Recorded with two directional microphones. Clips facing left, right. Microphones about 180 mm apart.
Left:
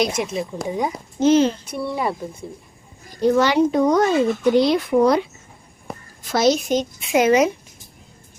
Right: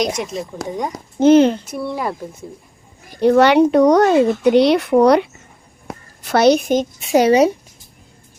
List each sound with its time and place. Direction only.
0.0 s speech: 5° left (ahead or behind)
1.2 s speech: 60° right (ahead or behind)
1.6 s speech: centre (ahead or behind)
3.1 s a child's voice: 65° right (ahead or behind); by 7.5 s 35° right (ahead or behind)